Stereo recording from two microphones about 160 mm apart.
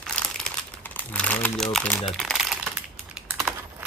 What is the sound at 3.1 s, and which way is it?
Typing, 5° right (ahead or behind).